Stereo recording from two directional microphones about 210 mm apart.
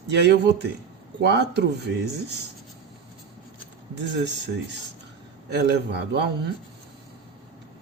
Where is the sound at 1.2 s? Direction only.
55° right (ahead or behind).